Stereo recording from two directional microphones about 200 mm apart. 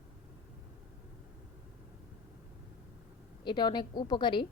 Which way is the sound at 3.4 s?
20° left (ahead or behind).